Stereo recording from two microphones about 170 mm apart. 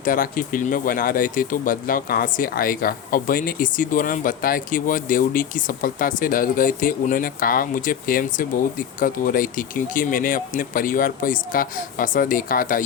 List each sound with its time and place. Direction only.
0.0 s speech: 55° left (ahead or behind)